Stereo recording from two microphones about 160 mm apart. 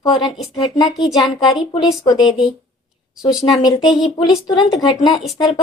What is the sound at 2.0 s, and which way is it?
Speech, 20° left (ahead or behind).